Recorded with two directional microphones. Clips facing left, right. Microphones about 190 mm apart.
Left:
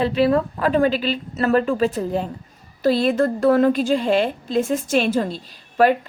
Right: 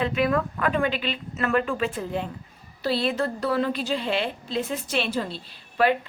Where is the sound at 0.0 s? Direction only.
30° left (ahead or behind).